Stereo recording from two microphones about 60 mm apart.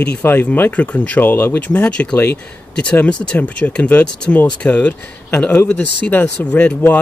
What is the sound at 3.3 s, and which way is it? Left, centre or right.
Speech, left.